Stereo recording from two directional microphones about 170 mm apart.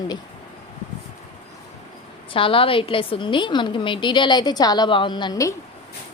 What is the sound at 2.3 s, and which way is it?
A woman's voice, 30° left (ahead or behind).